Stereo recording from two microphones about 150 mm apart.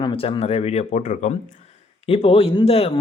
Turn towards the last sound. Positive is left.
turn(degrees=40)  # may be behind; listen again after turning